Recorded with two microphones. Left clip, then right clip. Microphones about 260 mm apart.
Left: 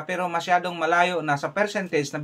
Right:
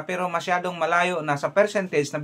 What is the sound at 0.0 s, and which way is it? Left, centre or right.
Speech, centre.